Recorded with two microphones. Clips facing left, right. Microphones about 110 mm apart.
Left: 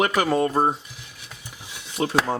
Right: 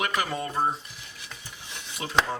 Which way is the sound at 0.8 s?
5° left (ahead or behind).